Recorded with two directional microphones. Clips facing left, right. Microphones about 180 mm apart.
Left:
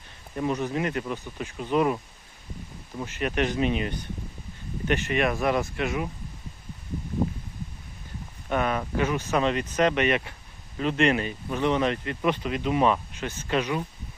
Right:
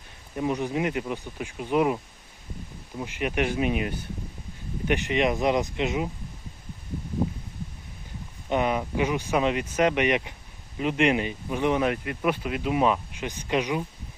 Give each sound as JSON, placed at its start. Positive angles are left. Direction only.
{"t": 0.3, "sound": "speech", "side_deg": -15}
{"t": 3.0, "sound": "speech", "side_deg": -10}
{"t": 8.4, "sound": "speech", "side_deg": -20}